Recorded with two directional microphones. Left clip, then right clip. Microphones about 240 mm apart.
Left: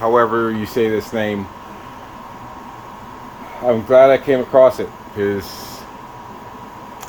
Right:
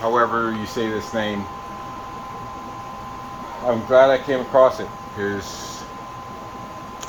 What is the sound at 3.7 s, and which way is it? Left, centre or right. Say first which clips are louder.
Speech: left 4 dB; left.